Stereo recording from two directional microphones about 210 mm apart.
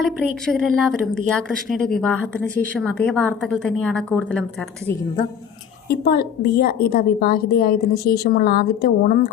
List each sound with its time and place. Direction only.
0.0 s a woman's voice: centre (ahead or behind)
5.9 s a woman's voice: 50° left (ahead or behind)